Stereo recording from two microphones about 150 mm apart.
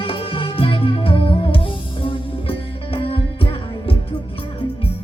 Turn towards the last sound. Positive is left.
turn(degrees=40)  # may be behind; listen again after turning